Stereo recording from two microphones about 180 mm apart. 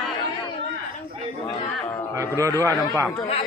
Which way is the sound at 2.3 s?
20° right (ahead or behind).